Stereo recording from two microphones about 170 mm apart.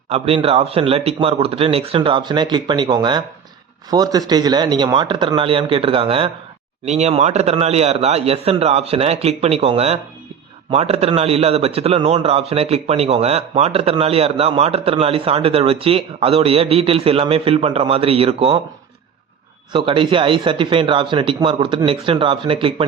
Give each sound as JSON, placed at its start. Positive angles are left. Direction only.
{"t": 0.1, "sound": "a man's voice", "side_deg": -35}
{"t": 19.7, "sound": "a man's voice", "side_deg": -30}